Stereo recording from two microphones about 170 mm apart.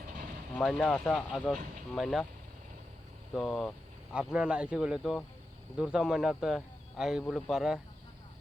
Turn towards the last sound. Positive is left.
turn(degrees=0)  # may be behind; listen again after turning